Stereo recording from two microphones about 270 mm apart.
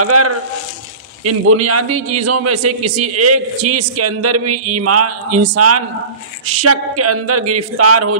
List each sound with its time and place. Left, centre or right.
0.0 s a man's voice: right